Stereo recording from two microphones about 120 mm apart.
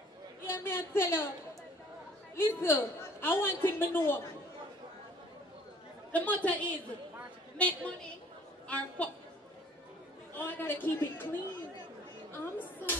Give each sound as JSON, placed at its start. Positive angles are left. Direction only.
{"t": 0.5, "sound": "a woman's voice", "side_deg": 20}
{"t": 2.3, "sound": "a woman's voice", "side_deg": 20}
{"t": 6.1, "sound": "a woman's voice", "side_deg": 10}
{"t": 10.3, "sound": "a woman's voice", "side_deg": 15}
{"t": 12.3, "sound": "a sound", "side_deg": 15}